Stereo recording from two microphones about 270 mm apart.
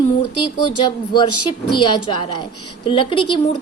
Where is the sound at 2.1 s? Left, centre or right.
Centre.